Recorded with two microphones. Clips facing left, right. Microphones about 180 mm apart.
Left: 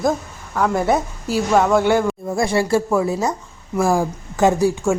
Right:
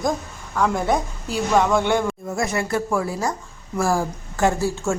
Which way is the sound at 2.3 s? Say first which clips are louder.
Left 6 dB; 30° left (ahead or behind).